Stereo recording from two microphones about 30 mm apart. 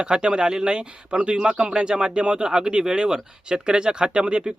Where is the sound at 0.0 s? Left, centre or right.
Right.